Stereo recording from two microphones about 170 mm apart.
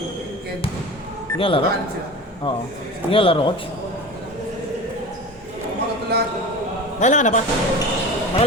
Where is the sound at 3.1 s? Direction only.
30° left (ahead or behind).